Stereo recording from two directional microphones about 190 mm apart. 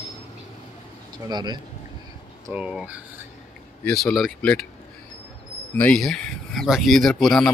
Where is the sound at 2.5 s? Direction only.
5° right (ahead or behind).